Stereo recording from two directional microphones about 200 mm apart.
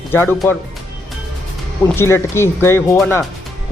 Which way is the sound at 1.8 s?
10° left (ahead or behind).